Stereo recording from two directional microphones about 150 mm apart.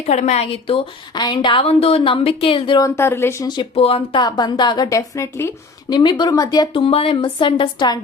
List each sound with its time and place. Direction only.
0.1 s a woman's voice: 50° left (ahead or behind); by 2.9 s 30° left (ahead or behind)
2.9 s speech: 15° left (ahead or behind)
5.9 s a woman's voice: 30° left (ahead or behind)